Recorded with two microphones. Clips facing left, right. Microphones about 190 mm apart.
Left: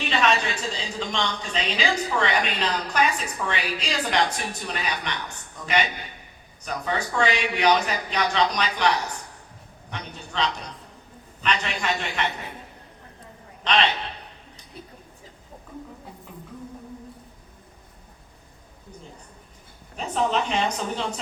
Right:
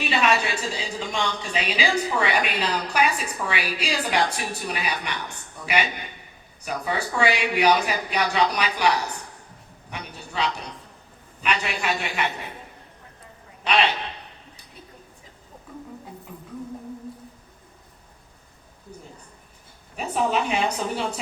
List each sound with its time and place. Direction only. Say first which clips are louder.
0.0 s a woman's voice: right 1 dB; 10° right (ahead or behind)
9.9 s a man's voice: even; 10° right (ahead or behind)
13.7 s a woman's voice: right 1 dB; 10° right (ahead or behind)
20.0 s a woman's voice: right 1 dB; 10° right (ahead or behind)